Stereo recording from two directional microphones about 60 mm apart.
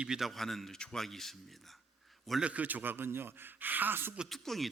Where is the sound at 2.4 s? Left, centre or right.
Right.